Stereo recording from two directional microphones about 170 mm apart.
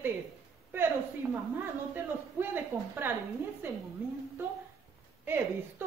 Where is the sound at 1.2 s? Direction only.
15° right (ahead or behind).